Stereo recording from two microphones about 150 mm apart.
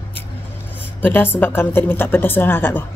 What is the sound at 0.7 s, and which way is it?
Speech, 15° left (ahead or behind).